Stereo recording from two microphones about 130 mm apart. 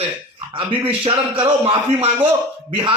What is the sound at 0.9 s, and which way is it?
Speech, 40° right (ahead or behind).